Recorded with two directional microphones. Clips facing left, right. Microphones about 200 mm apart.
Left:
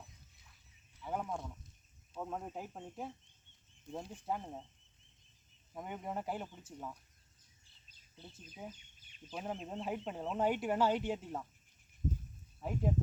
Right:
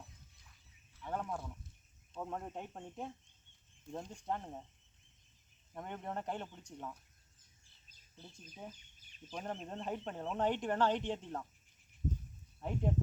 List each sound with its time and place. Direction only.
1.0 s a sound: 5° left (ahead or behind)
2.1 s speech: centre (ahead or behind)
5.7 s speech: 5° left (ahead or behind)
8.1 s speech: 15° left (ahead or behind)
12.5 s speech: 5° left (ahead or behind)